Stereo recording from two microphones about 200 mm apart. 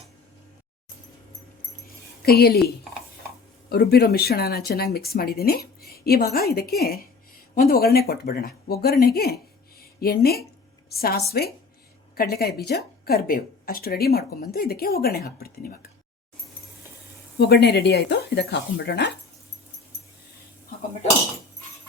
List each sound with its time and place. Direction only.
2.2 s speech: 50° left (ahead or behind)
3.7 s speech: 50° left (ahead or behind)
17.3 s speech: 50° left (ahead or behind)